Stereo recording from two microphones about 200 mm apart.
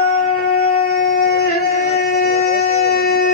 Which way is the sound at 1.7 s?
35° left (ahead or behind).